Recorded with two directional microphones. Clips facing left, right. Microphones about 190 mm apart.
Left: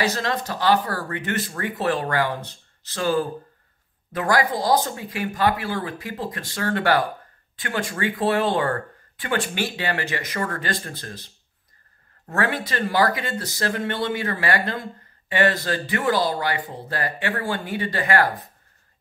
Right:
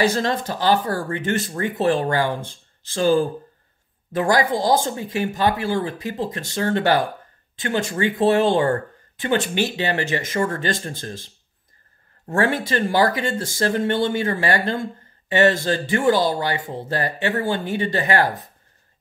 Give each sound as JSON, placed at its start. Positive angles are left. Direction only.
{"t": 0.0, "sound": "speech", "side_deg": -30}
{"t": 12.3, "sound": "speech", "side_deg": -30}